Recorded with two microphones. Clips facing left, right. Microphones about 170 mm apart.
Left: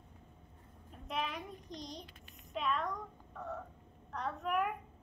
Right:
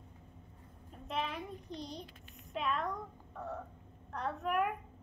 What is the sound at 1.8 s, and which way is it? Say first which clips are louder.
Speech: right 2 dB; 35° left (ahead or behind).